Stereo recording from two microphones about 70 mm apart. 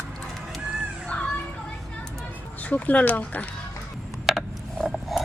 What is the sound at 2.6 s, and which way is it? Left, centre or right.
Speech, left.